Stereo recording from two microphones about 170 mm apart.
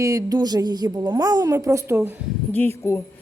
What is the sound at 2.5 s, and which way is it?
Speech, 10° left (ahead or behind).